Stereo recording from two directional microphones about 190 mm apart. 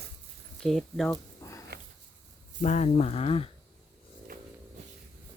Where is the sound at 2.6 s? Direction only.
40° left (ahead or behind).